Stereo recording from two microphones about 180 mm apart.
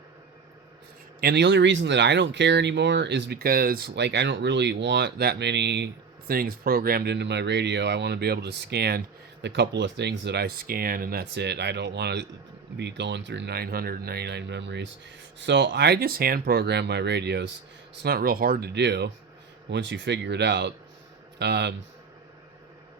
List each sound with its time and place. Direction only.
1.2 s speech: 70° right (ahead or behind)
18.0 s speech: 55° right (ahead or behind); by 19.1 s 70° right (ahead or behind)
19.7 s speech: 80° right